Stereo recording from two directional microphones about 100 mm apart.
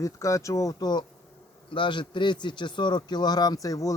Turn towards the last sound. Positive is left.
turn(degrees=35)  # may be behind; listen again after turning